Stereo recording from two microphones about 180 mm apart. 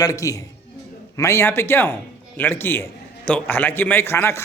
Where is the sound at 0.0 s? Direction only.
20° left (ahead or behind).